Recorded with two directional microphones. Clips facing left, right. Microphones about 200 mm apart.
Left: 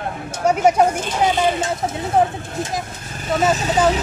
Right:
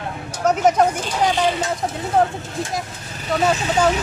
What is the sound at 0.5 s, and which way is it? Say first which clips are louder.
Speech: left 1 dB; 10° left (ahead or behind).